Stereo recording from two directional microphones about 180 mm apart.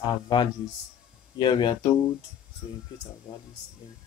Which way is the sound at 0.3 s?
25° left (ahead or behind).